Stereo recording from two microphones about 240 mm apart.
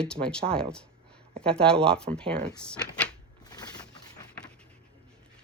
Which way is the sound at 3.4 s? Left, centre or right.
Centre.